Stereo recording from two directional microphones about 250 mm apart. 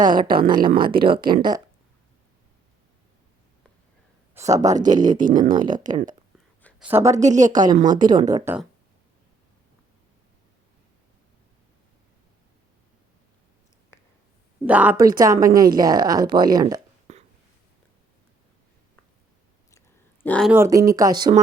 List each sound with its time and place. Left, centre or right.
0.0 s speech: centre
4.5 s speech: centre
5.0 s speech: right
6.6 s a sound: centre
6.8 s speech: centre
7.2 s speech: right
7.5 s speech: centre
7.8 s speech: right
8.0 s speech: centre
13.9 s a sound: centre
14.6 s speech: centre
20.2 s speech: centre
20.5 s speech: centre